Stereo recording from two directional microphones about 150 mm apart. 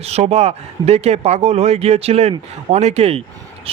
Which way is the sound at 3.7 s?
40° right (ahead or behind).